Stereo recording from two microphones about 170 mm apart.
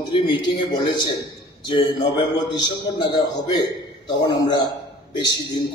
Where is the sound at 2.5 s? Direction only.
25° left (ahead or behind).